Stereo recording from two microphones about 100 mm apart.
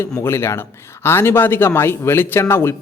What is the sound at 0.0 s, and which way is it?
A man's voice, 25° left (ahead or behind).